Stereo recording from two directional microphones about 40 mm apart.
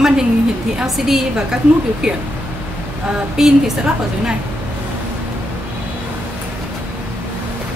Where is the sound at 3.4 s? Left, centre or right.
Centre.